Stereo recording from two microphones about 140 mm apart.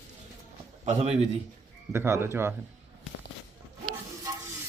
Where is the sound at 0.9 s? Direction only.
50° right (ahead or behind).